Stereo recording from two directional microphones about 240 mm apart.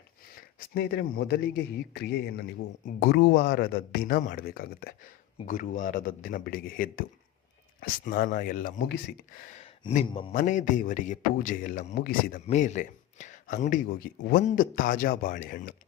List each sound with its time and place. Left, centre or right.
0.7 s a man's voice: left
9.6 s a sound: left
10.3 s a man's voice: left